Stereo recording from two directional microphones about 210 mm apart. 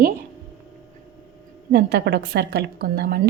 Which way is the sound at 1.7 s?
50° right (ahead or behind).